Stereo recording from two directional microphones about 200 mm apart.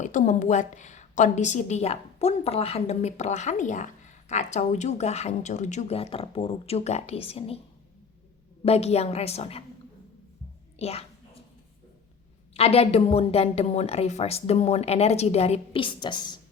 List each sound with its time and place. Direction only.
0.0 s a woman's voice: 40° left (ahead or behind)
8.6 s a woman's voice: 30° left (ahead or behind)
10.8 s a child's voice: 30° left (ahead or behind)
12.5 s a woman's voice: 30° left (ahead or behind)